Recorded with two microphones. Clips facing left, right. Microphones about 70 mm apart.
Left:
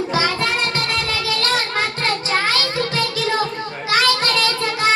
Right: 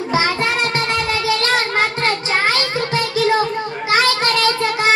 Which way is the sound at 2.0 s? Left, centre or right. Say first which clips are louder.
Right 2 dB; right.